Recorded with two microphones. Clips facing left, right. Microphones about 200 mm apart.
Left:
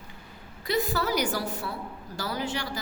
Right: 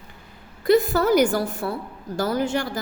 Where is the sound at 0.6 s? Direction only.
50° right (ahead or behind).